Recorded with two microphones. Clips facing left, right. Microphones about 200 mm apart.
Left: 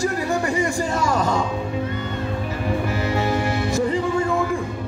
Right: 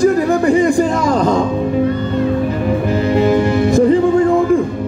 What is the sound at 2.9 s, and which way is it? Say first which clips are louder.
Music: right 9 dB; 20° right (ahead or behind).